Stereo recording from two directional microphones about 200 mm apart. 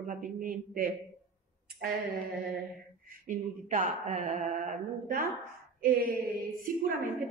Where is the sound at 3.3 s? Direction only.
40° right (ahead or behind).